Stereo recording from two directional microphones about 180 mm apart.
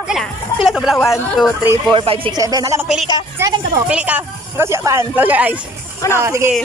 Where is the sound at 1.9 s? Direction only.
30° right (ahead or behind).